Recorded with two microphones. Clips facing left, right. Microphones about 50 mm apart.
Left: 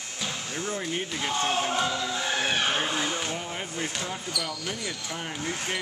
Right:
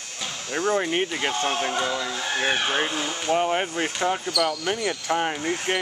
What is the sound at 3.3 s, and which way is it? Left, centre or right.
Speech, right.